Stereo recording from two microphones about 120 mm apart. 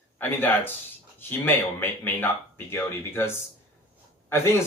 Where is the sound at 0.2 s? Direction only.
15° left (ahead or behind).